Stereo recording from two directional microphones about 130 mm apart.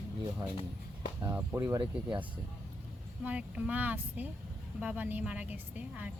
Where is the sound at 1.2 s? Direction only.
20° right (ahead or behind).